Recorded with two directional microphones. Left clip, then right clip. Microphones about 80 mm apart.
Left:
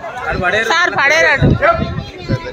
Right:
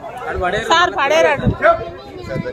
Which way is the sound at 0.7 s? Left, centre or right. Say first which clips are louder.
Even; centre.